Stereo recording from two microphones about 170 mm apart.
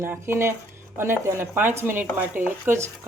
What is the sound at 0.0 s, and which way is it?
Speech, 15° right (ahead or behind).